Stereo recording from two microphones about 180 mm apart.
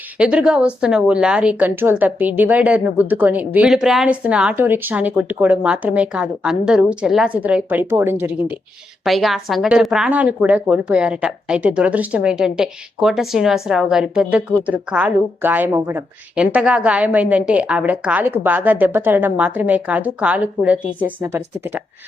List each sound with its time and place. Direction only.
0.2 s a woman's voice: 5° right (ahead or behind)